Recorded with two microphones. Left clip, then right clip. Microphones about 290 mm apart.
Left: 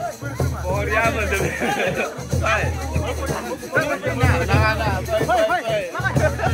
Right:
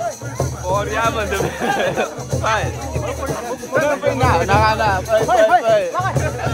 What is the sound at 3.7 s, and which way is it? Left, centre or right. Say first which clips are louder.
Music: right 5 dB; centre.